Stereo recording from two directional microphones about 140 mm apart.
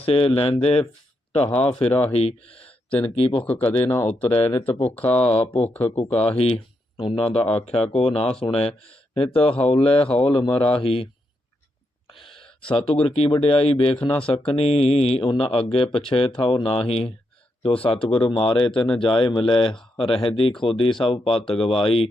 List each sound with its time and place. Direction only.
0.0 s speech: 40° left (ahead or behind)
2.6 s a sound: 10° left (ahead or behind)
3.2 s speech: 40° left (ahead or behind)
3.8 s speech: 20° left (ahead or behind)
4.1 s speech: 45° left (ahead or behind)
4.9 s speech: 10° left (ahead or behind)
5.1 s speech: 45° left (ahead or behind)
5.6 s speech: 10° left (ahead or behind)
5.9 s speech: 45° left (ahead or behind)
12.1 s speech: 40° left (ahead or behind)